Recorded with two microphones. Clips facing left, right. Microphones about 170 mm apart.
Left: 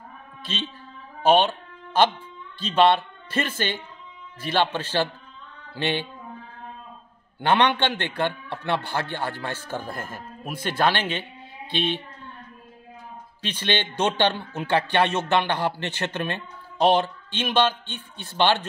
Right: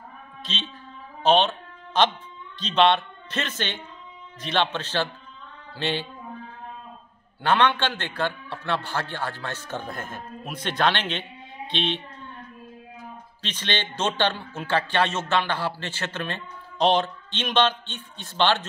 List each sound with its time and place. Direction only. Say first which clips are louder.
0.4 s a man's voice: left 3 dB; 10° left (ahead or behind)
2.6 s a man's voice: left 1 dB; 10° left (ahead or behind)
7.4 s a man's voice: left 1 dB; 15° left (ahead or behind)
13.4 s a man's voice: left 3 dB; 10° left (ahead or behind)